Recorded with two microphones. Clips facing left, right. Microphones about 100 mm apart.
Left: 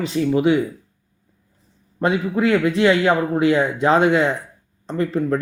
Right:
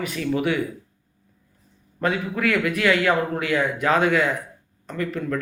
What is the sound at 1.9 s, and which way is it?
A man's voice, 20° left (ahead or behind).